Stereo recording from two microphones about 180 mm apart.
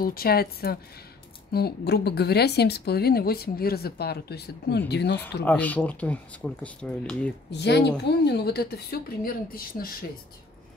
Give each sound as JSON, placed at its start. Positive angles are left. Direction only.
{"t": 0.0, "sound": "speech", "side_deg": 55}
{"t": 5.4, "sound": "speech", "side_deg": 10}
{"t": 7.5, "sound": "speech", "side_deg": 70}